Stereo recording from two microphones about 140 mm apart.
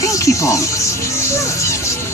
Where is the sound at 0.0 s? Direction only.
25° left (ahead or behind).